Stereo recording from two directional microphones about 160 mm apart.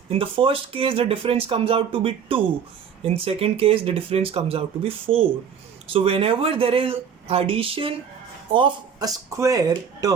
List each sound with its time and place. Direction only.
0.1 s speech: 35° right (ahead or behind)